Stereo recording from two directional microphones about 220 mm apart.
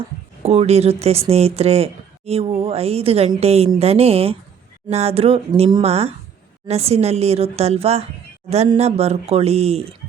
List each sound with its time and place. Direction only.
0.4 s speech: 30° right (ahead or behind)